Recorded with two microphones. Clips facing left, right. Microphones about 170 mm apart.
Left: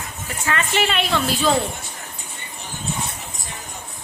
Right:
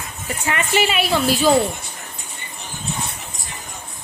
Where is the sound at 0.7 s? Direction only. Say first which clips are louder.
Right 4 dB; 5° right (ahead or behind).